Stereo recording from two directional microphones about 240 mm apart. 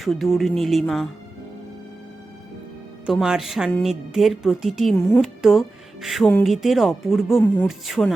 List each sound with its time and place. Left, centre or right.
0.0 s a woman's voice: centre
3.1 s a woman's voice: centre